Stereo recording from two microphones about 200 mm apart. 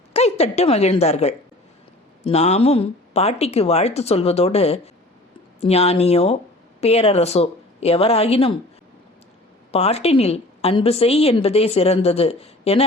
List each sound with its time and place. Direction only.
0.1 s a woman's voice: 30° left (ahead or behind)
9.7 s a woman's voice: 30° left (ahead or behind)